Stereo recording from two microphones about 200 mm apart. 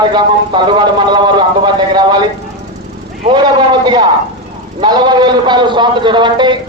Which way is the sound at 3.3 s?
20° right (ahead or behind).